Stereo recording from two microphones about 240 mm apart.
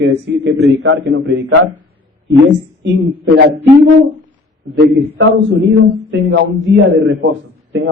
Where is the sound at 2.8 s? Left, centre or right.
Right.